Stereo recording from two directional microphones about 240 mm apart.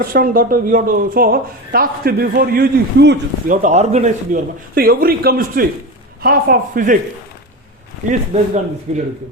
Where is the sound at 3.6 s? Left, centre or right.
Right.